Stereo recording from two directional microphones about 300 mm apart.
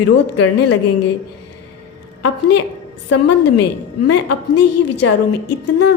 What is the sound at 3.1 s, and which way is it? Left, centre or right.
A woman's voice, left.